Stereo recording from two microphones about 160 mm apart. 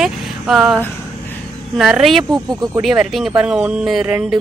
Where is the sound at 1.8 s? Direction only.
Centre (ahead or behind).